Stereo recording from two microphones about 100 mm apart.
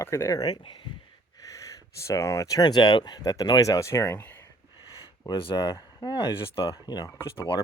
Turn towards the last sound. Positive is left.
turn(degrees=40)  # may be behind; listen again after turning